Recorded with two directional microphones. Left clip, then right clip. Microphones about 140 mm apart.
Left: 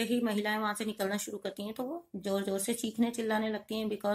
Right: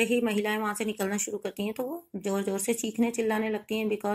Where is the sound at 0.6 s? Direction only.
Centre (ahead or behind).